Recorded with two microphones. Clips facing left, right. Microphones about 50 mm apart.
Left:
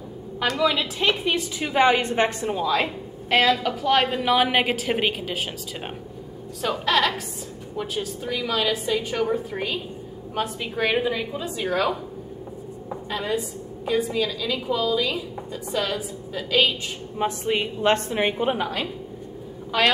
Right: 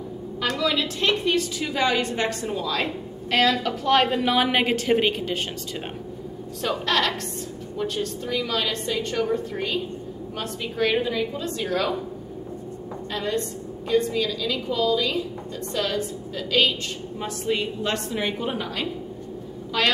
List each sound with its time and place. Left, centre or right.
0.6 s a woman's voice: centre
1.3 s a woman's voice: left
2.4 s a woman's voice: centre
6.6 s a woman's voice: centre
13.1 s a woman's voice: centre
17.2 s a woman's voice: left
19.7 s a woman's voice: centre